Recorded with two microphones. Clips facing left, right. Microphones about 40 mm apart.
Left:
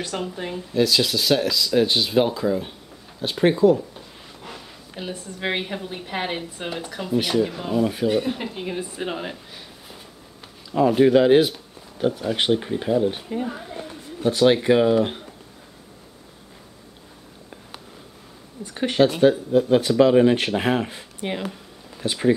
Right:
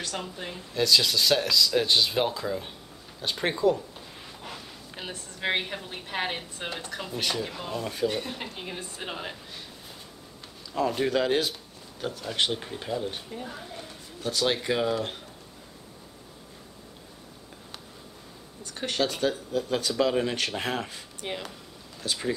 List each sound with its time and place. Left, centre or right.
0.0 s a woman's voice: centre
13.3 s speech: left
18.6 s speech: left